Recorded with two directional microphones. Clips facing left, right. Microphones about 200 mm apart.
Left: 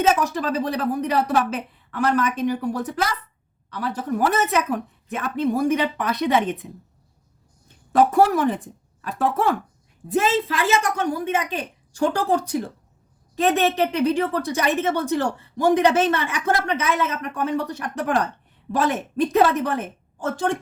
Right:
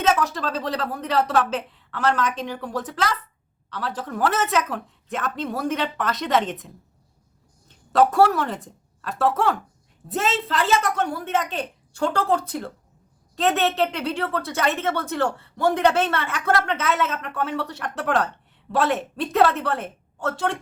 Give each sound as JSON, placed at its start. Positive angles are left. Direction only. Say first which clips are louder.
{"t": 0.0, "sound": "speech", "louder": "left 2 dB", "side_deg": 15}
{"t": 7.9, "sound": "speech", "louder": "left 1 dB", "side_deg": 10}
{"t": 20.2, "sound": "a woman's voice", "louder": "left 2 dB", "side_deg": -70}